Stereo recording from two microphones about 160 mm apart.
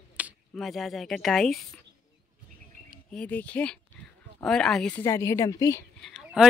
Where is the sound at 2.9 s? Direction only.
5° left (ahead or behind).